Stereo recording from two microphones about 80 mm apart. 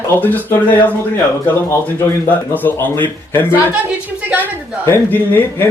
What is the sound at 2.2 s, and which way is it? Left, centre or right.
Speech, left.